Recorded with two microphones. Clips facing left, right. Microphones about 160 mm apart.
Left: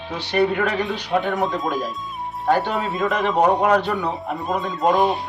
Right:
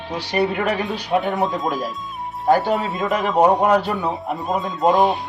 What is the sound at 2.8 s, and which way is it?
Speech, centre (ahead or behind).